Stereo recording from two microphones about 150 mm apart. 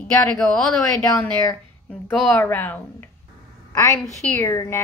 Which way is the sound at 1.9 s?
5° left (ahead or behind).